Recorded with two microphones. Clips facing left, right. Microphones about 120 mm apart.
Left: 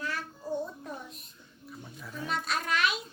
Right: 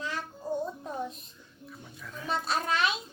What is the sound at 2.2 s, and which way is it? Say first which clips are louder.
Speech: right 3 dB; 30° right (ahead or behind).